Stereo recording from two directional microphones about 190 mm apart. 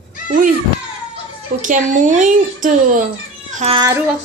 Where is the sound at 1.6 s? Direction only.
40° right (ahead or behind).